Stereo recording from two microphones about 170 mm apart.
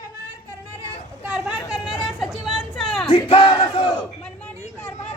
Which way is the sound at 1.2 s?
5° right (ahead or behind).